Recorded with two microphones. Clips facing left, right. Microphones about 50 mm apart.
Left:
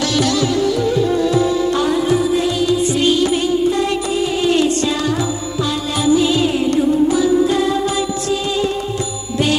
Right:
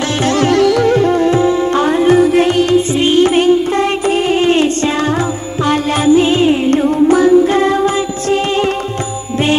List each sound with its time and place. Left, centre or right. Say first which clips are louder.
0.2 s music: right 5 dB; right
0.5 s music: right 6 dB; right
2.9 s music: right 4 dB; right
6.7 s music: right 4 dB; right